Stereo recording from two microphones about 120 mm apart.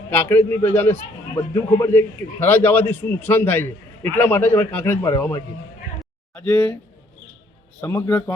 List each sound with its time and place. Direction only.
0.1 s a man's voice: 15° left (ahead or behind)
7.8 s a man's voice: 20° left (ahead or behind)